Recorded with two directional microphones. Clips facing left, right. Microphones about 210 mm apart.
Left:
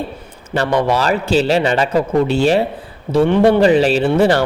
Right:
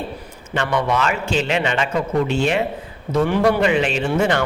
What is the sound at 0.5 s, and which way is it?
Speech, 35° left (ahead or behind).